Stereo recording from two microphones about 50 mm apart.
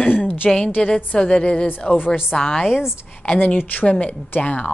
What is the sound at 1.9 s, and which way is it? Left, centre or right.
Speech, left.